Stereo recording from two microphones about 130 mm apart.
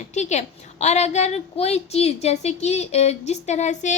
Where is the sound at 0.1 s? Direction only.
60° left (ahead or behind).